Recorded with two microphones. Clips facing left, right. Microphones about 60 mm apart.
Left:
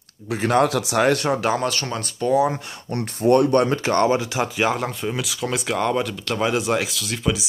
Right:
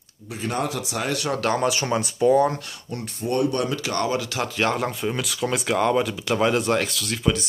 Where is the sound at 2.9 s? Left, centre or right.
Left.